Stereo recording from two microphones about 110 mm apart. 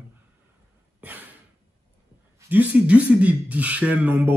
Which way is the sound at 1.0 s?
15° right (ahead or behind).